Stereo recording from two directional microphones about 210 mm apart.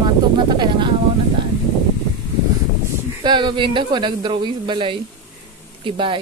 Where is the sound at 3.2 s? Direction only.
20° right (ahead or behind).